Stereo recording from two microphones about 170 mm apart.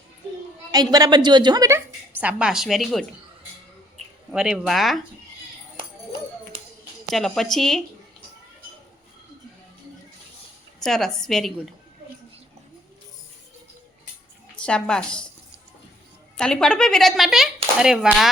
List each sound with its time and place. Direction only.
0.7 s a woman's voice: 25° right (ahead or behind); by 3.1 s centre (ahead or behind)
4.3 s speech: 5° right (ahead or behind)
7.1 s speech: centre (ahead or behind)
10.8 s speech: centre (ahead or behind)
14.5 s a woman's voice: 5° left (ahead or behind)
16.4 s speech: 5° left (ahead or behind)